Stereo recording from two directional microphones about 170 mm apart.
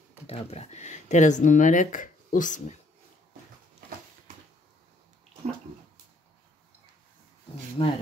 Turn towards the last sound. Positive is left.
turn(degrees=30)  # may be behind; listen again after turning